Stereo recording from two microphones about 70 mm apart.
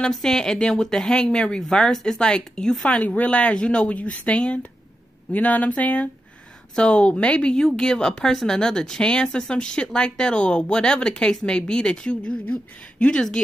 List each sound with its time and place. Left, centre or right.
0.0 s speech: centre